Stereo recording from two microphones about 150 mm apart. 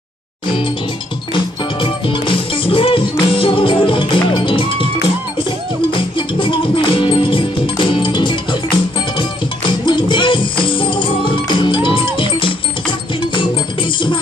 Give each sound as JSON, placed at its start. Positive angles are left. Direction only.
{"t": 1.3, "sound": "music", "side_deg": 35}
{"t": 5.9, "sound": "music", "side_deg": 35}